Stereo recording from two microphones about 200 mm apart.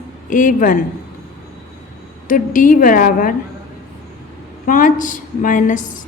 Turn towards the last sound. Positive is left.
turn(degrees=40)  # may be behind; listen again after turning